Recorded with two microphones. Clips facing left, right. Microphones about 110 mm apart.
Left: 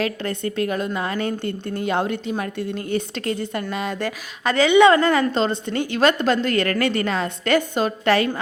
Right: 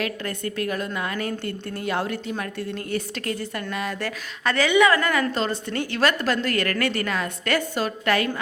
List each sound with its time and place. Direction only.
0.0 s a woman's voice: 25° left (ahead or behind)